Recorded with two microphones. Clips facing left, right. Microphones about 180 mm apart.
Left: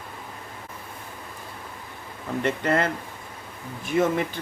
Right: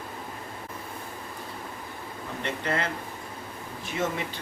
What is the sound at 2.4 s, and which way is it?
Speech, 50° left (ahead or behind).